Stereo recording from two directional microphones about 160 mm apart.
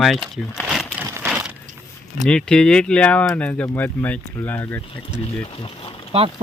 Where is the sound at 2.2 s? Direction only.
5° left (ahead or behind).